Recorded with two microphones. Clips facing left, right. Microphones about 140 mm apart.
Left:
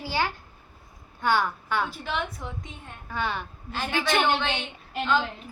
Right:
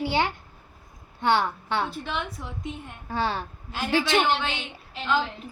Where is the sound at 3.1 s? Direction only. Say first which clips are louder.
Right 3 dB; 35° right (ahead or behind).